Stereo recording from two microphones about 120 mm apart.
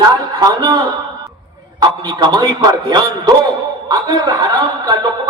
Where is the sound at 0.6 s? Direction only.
40° right (ahead or behind).